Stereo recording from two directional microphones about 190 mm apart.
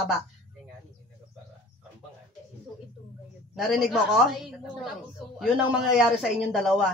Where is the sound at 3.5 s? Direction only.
Centre (ahead or behind).